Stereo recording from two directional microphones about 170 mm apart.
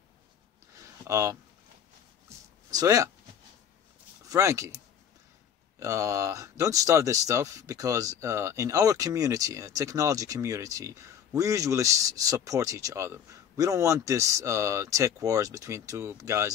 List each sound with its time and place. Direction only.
1.0 s speech: 15° right (ahead or behind)
2.2 s a sound: 20° right (ahead or behind)
4.3 s speech: 20° right (ahead or behind)
5.8 s speech: 15° right (ahead or behind)